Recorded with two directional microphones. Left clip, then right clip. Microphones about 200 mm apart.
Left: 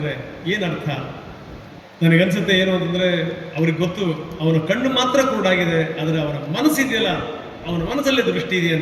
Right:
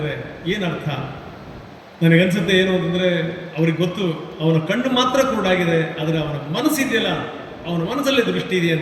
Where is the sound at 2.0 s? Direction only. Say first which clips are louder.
Even; 20° left (ahead or behind).